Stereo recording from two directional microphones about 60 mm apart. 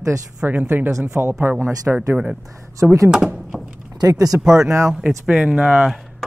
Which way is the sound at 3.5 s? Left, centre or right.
Centre.